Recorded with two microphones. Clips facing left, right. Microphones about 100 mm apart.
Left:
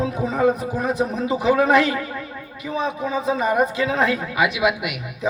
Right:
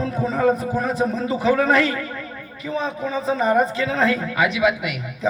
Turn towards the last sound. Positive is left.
turn(degrees=10)  # may be behind; listen again after turning